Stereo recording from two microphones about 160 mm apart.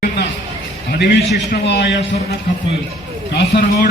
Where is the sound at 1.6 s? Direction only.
90° left.